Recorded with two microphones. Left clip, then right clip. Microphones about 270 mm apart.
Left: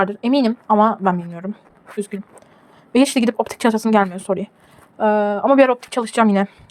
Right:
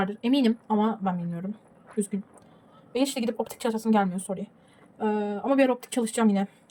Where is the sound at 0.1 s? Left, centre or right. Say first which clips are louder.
Left 7 dB; centre.